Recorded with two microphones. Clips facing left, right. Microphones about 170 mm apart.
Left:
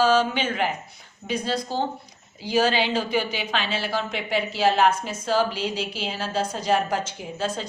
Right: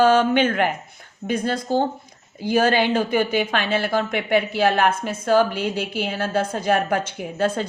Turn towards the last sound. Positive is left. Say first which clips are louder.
# right 6 dB
turn(degrees=-55)  # may be behind; listen again after turning